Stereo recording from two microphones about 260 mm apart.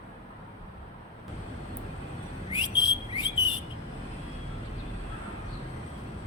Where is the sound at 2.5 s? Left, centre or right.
Centre.